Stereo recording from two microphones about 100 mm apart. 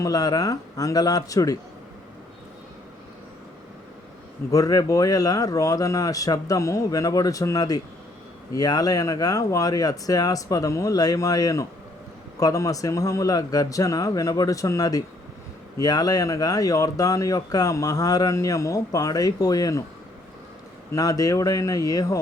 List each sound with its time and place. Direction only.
0.0 s speech: 40° left (ahead or behind)
4.5 s speech: 40° left (ahead or behind)
20.9 s speech: 35° left (ahead or behind)